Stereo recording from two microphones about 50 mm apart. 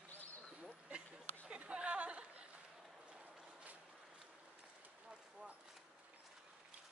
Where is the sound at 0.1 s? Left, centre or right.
Left.